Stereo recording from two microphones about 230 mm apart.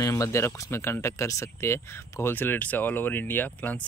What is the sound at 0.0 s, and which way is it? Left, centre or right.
Speech, centre.